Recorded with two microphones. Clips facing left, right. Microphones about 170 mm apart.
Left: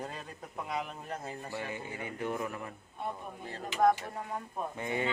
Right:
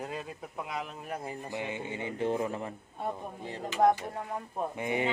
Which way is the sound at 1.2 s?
15° right (ahead or behind).